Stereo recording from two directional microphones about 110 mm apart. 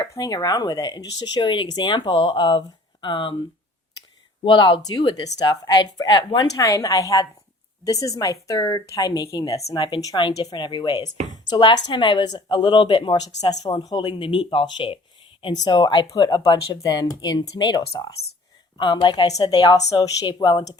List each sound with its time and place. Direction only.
0.2 s speech: 35° left (ahead or behind)
4.4 s speech: 45° left (ahead or behind)
6.6 s speech: 30° left (ahead or behind)
9.7 s speech: 45° left (ahead or behind)
13.5 s speech: 35° left (ahead or behind)
20.2 s speech: 45° left (ahead or behind)